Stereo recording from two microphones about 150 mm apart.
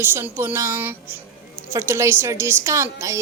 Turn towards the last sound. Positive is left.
turn(degrees=-20)  # may be behind; listen again after turning